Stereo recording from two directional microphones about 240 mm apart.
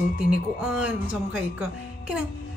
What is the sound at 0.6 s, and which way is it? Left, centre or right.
A child's voice, centre.